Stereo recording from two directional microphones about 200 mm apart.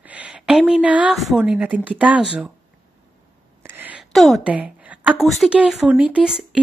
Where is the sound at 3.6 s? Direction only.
10° right (ahead or behind).